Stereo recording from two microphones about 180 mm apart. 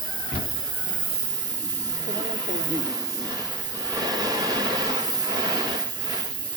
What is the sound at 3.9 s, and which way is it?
Train, 20° right (ahead or behind).